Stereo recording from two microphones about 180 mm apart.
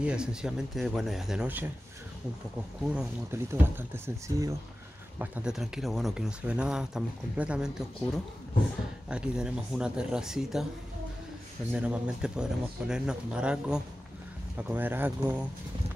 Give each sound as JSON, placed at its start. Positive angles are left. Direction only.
{"t": 0.0, "sound": "speech", "side_deg": -5}
{"t": 2.8, "sound": "speech", "side_deg": -5}
{"t": 9.1, "sound": "speech", "side_deg": -5}
{"t": 11.7, "sound": "speech", "side_deg": -5}